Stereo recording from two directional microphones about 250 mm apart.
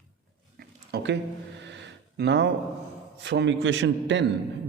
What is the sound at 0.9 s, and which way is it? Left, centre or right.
Speech, right.